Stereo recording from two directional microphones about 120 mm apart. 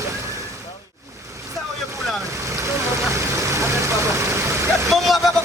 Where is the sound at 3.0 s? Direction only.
25° right (ahead or behind).